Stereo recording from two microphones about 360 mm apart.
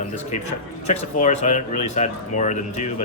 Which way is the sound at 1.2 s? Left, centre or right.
Centre.